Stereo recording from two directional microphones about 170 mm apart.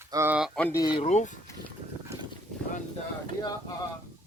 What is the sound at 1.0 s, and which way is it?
Speech, 45° left (ahead or behind).